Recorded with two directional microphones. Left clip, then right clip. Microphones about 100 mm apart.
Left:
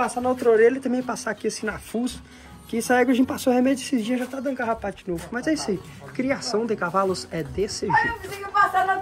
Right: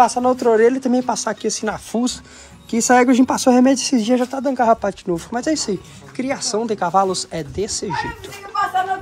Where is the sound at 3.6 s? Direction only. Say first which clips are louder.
Right 7 dB; 90° right; by 5.3 s 75° right (ahead or behind).